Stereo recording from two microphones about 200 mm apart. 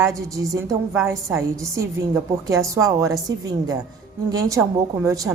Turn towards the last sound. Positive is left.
turn(degrees=-15)  # may be behind; listen again after turning